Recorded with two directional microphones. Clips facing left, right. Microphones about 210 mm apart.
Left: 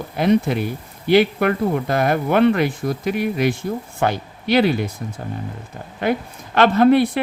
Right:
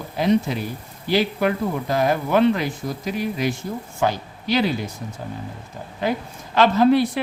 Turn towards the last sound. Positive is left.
turn(degrees=60)  # may be behind; listen again after turning